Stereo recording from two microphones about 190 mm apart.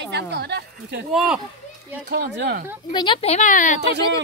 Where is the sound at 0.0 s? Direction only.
65° right (ahead or behind).